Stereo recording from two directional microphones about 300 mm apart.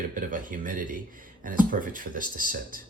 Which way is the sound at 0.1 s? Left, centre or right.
Right.